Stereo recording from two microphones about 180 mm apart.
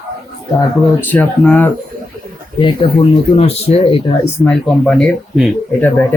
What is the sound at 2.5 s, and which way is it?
Speech, 30° left (ahead or behind).